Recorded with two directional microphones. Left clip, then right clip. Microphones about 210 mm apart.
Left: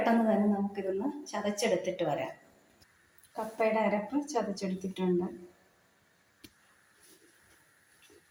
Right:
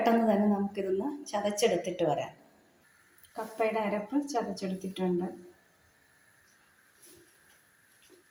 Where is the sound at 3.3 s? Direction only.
5° right (ahead or behind).